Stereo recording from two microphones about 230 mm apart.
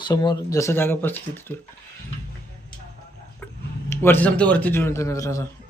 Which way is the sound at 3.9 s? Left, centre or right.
Centre.